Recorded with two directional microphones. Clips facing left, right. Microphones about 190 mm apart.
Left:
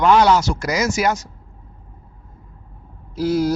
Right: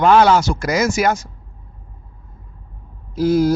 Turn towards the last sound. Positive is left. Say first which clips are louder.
# right 4 dB
turn(degrees=-50)  # may be behind; listen again after turning